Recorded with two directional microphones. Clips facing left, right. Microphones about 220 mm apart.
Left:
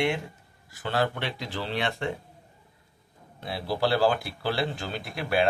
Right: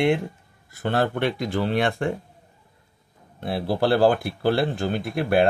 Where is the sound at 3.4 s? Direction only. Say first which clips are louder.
Right 5 dB; 50° right (ahead or behind).